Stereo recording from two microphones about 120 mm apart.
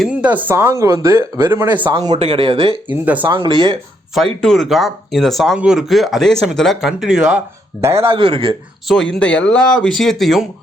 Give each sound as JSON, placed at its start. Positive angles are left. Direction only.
{"t": 0.1, "sound": "speech", "side_deg": -10}
{"t": 0.5, "sound": "speech", "side_deg": -25}
{"t": 1.8, "sound": "speech", "side_deg": -40}
{"t": 2.1, "sound": "speech", "side_deg": -50}
{"t": 2.9, "sound": "speech", "side_deg": -15}
{"t": 3.2, "sound": "speech", "side_deg": -40}
{"t": 4.4, "sound": "speech", "side_deg": 5}
{"t": 7.8, "sound": "speech", "side_deg": -25}
{"t": 8.0, "sound": "speech", "side_deg": -45}
{"t": 8.9, "sound": "speech", "side_deg": 10}